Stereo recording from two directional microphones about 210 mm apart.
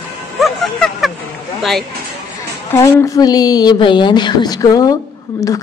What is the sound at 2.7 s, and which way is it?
A woman's voice, 15° left (ahead or behind).